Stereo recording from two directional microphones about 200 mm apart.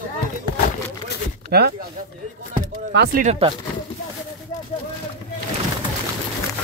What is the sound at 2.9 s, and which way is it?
Speech, 55° right (ahead or behind).